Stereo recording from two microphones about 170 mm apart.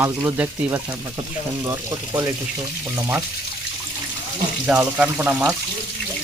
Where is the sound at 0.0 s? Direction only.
15° right (ahead or behind).